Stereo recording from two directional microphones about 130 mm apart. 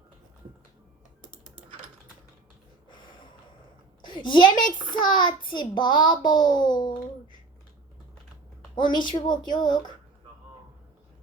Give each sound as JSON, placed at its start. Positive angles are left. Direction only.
{"t": 4.0, "sound": "a woman's voice", "side_deg": 35}
{"t": 8.7, "sound": "a woman's voice", "side_deg": 35}